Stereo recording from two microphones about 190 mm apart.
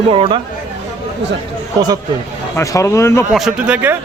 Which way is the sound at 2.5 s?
15° left (ahead or behind).